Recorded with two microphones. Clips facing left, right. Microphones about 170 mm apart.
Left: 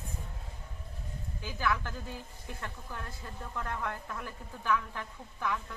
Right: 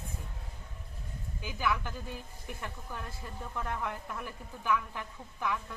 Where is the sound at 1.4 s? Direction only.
15° right (ahead or behind).